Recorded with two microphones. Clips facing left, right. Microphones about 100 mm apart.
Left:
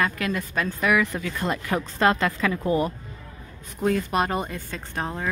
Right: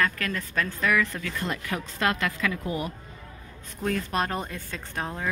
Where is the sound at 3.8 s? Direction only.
10° left (ahead or behind).